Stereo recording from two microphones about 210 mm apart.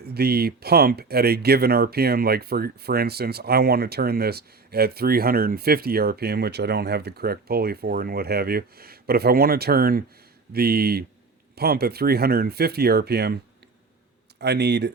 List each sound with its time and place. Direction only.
0.0 s speech: 50° right (ahead or behind)
14.3 s speech: 50° right (ahead or behind)